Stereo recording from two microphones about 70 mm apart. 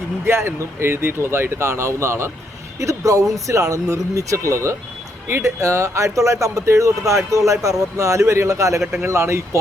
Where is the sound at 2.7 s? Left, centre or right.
Right.